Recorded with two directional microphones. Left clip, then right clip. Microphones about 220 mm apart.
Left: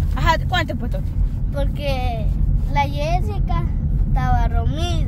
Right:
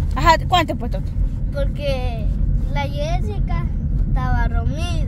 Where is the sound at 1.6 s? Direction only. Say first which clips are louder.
Right 1 dB; 5° right (ahead or behind).